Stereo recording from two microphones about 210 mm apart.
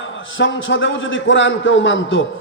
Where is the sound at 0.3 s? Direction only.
65° left (ahead or behind).